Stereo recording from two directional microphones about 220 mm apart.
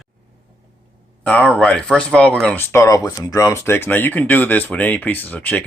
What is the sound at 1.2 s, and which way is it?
Speech, 5° left (ahead or behind).